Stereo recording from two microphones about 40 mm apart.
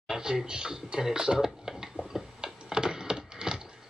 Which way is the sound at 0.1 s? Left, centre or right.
Centre.